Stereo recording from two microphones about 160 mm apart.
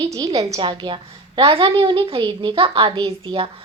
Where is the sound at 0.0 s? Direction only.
30° right (ahead or behind).